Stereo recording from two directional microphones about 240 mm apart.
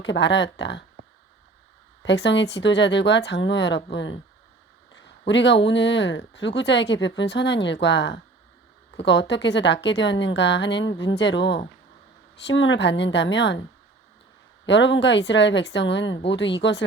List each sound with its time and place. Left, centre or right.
0.0 s speech: left
2.0 s speech: left
5.2 s speech: left
14.7 s speech: left